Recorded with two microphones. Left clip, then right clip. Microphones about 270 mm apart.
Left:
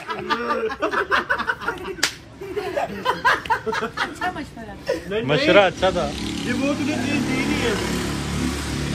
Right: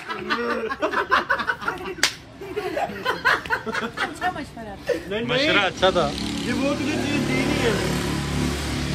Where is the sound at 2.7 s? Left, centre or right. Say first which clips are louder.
Left 2 dB; centre.